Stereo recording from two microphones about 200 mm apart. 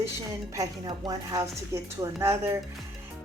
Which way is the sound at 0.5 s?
20° right (ahead or behind).